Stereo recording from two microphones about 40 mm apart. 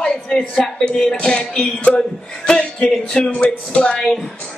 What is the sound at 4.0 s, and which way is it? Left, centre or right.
Speech, centre.